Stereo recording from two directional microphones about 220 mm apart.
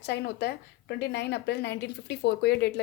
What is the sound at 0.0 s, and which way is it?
A woman's voice, 50° left (ahead or behind).